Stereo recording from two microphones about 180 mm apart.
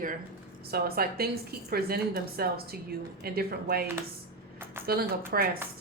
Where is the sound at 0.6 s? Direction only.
60° right (ahead or behind).